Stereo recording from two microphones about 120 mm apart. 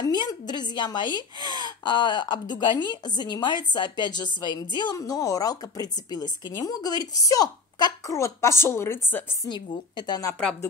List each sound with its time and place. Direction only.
0.0 s a woman's voice: 35° left (ahead or behind); by 9.2 s 20° left (ahead or behind)
9.5 s a woman's voice: 40° left (ahead or behind)